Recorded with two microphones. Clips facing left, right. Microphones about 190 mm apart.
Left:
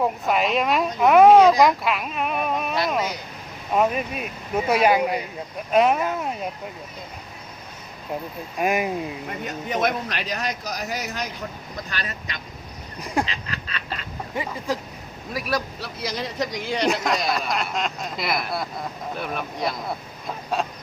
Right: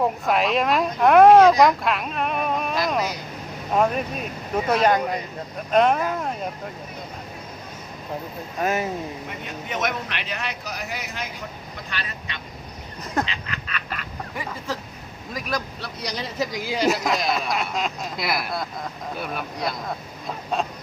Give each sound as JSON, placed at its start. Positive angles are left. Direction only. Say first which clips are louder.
{"t": 0.0, "sound": "speech", "louder": "right 1 dB", "side_deg": 0}
{"t": 3.8, "sound": "speech", "louder": "even", "side_deg": 5}
{"t": 8.5, "sound": "speech", "louder": "left 1 dB", "side_deg": 15}
{"t": 9.6, "sound": "a man's voice", "louder": "left 3 dB", "side_deg": 35}
{"t": 13.2, "sound": "duck", "louder": "even", "side_deg": 35}
{"t": 15.3, "sound": "speech", "louder": "left 2 dB", "side_deg": 5}
{"t": 20.2, "sound": "a sound", "louder": "even", "side_deg": 0}